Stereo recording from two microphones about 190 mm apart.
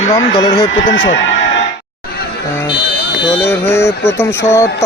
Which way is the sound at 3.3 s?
15° left (ahead or behind).